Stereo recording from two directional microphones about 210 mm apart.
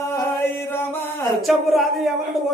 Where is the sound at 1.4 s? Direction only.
Centre (ahead or behind).